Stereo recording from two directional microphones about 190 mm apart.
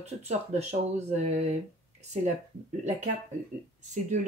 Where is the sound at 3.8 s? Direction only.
40° right (ahead or behind).